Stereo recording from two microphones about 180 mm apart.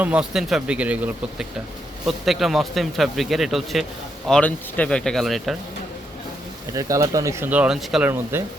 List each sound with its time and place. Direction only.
0.0 s speech: 5° right (ahead or behind)
6.7 s speech: 20° right (ahead or behind)